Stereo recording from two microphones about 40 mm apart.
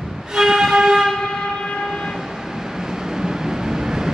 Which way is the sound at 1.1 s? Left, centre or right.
Centre.